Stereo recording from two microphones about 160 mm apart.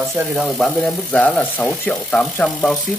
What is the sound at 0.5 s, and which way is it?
Speech, centre (ahead or behind).